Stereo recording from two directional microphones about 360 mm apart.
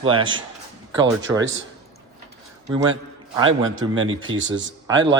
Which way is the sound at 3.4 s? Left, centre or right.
Right.